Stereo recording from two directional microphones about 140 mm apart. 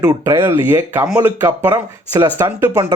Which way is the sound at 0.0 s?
25° right (ahead or behind).